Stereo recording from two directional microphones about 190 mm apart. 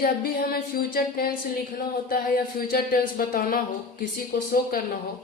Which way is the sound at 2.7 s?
50° left (ahead or behind).